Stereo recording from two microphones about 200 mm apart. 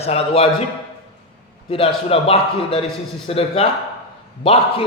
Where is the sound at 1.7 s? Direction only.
30° left (ahead or behind).